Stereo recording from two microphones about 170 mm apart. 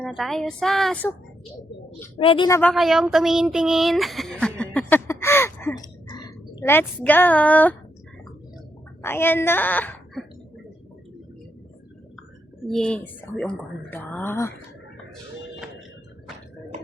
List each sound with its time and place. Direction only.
0.0 s a woman's voice: centre (ahead or behind)
2.1 s a woman's voice: 30° left (ahead or behind)
2.5 s speech: 10° left (ahead or behind)
2.7 s a woman's voice: centre (ahead or behind)
9.0 s speech: 15° left (ahead or behind)
12.6 s a woman's voice: 5° left (ahead or behind)